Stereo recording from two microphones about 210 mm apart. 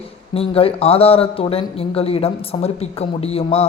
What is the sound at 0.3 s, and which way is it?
A man's voice, 25° left (ahead or behind).